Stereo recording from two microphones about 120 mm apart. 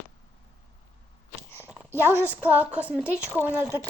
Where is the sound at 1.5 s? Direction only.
20° left (ahead or behind).